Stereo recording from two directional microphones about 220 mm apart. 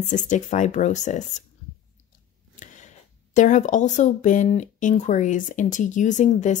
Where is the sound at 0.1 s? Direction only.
35° left (ahead or behind).